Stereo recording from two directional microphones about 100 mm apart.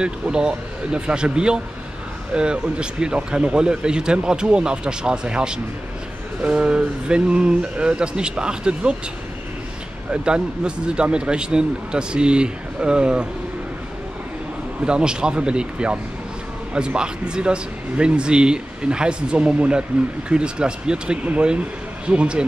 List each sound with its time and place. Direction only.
0.0 s speech: 10° right (ahead or behind)
10.1 s speech: 10° right (ahead or behind)
14.9 s speech: 10° right (ahead or behind)